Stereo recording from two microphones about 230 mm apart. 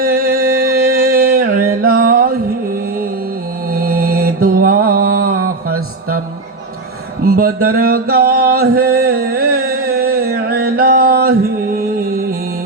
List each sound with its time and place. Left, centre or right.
0.0 s music: right
3.7 s mantra: right
7.3 s a sound: right
10.6 s mantra: right